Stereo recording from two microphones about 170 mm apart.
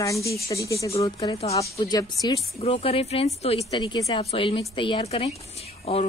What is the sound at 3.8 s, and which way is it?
Speech, 25° left (ahead or behind).